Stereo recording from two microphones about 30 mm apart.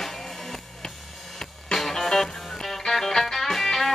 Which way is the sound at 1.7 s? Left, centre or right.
Centre.